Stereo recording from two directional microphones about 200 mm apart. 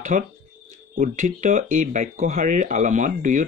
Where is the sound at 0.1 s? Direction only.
40° right (ahead or behind).